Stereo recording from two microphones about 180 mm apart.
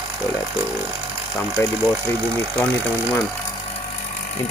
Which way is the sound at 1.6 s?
15° left (ahead or behind).